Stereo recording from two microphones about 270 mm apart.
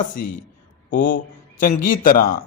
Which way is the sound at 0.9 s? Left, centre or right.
Left.